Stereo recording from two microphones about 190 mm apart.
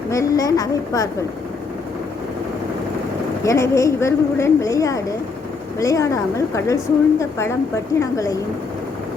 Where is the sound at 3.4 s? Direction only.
15° left (ahead or behind).